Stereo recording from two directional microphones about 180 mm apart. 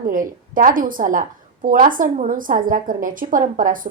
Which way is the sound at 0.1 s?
50° right (ahead or behind).